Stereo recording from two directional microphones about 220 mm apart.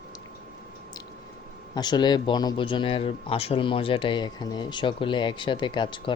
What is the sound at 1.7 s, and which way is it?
Speech, 20° left (ahead or behind).